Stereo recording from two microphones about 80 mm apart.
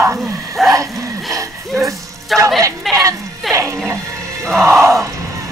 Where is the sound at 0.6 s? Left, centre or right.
Centre.